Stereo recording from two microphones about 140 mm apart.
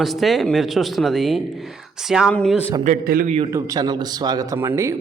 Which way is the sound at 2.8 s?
80° right.